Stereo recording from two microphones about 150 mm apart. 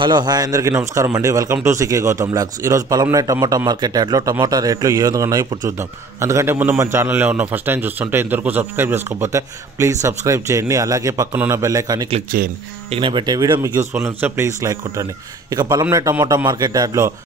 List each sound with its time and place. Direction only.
0.0 s a man's voice: 30° right (ahead or behind)
12.3 s speech: 70° right (ahead or behind)
12.9 s a man's voice: 35° right (ahead or behind)